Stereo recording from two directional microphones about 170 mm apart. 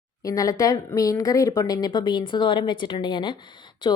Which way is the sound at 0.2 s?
20° left (ahead or behind).